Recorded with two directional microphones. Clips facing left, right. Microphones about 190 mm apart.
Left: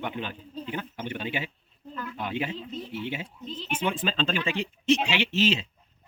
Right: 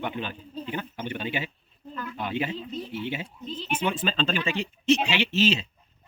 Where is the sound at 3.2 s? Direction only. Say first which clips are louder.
Right 2 dB; 10° right (ahead or behind).